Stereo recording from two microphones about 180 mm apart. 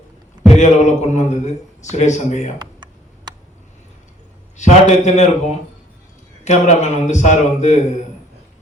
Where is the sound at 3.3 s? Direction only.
25° right (ahead or behind).